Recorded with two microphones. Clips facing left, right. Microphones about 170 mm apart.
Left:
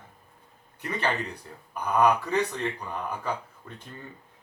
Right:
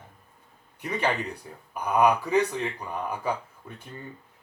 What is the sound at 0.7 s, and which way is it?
Speech, 10° right (ahead or behind).